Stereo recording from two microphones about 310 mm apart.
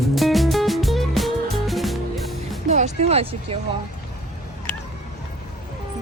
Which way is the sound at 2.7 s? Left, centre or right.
Right.